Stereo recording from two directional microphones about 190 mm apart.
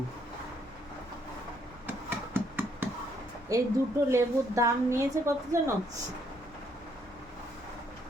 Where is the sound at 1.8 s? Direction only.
10° right (ahead or behind).